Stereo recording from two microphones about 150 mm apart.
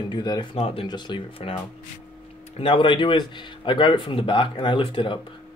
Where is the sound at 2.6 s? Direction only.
35° left (ahead or behind).